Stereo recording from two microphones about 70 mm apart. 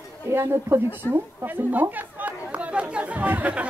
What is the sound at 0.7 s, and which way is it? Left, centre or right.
Speech, right.